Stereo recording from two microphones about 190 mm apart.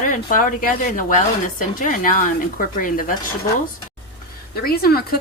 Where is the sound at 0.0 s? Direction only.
45° left (ahead or behind).